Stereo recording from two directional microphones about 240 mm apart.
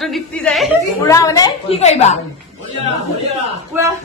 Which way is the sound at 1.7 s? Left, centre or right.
Left.